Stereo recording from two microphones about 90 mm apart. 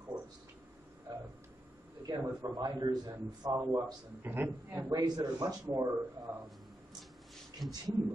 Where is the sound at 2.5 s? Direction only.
45° right (ahead or behind).